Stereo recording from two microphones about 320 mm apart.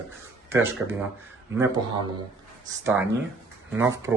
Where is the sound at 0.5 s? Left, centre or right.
Centre.